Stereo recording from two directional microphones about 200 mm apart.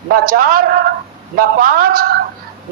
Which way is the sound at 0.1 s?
45° right (ahead or behind).